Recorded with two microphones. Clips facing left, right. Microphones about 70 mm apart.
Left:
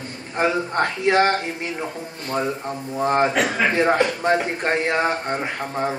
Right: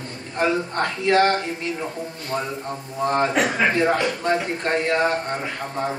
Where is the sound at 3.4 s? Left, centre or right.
Centre.